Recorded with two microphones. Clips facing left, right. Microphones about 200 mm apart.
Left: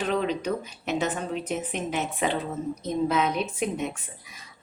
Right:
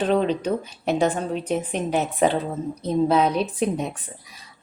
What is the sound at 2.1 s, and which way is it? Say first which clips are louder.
Speech: right 6 dB; 40° right (ahead or behind).